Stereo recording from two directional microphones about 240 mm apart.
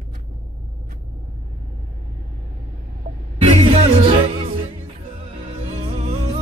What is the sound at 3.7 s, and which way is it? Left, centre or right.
Music, right.